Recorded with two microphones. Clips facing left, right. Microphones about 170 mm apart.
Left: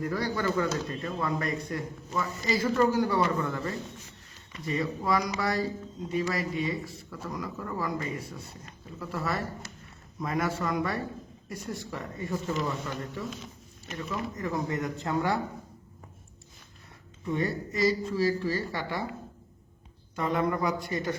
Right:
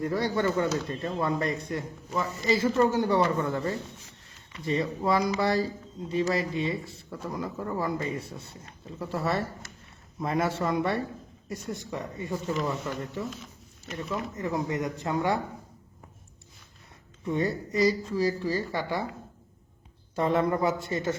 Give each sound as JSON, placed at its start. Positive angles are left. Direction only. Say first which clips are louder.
{"t": 0.0, "sound": "speech", "louder": "right 3 dB", "side_deg": -25}
{"t": 14.3, "sound": "speech", "louder": "right 2 dB", "side_deg": -20}
{"t": 17.3, "sound": "speech", "louder": "right 3 dB", "side_deg": -20}
{"t": 20.1, "sound": "speech", "louder": "right 3 dB", "side_deg": -30}